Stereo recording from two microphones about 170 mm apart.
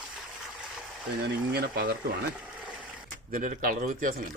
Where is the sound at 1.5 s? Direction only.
65° right (ahead or behind).